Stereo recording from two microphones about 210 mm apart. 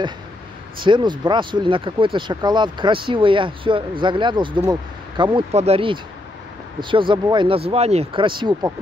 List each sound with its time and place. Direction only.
0.8 s speech: 20° right (ahead or behind)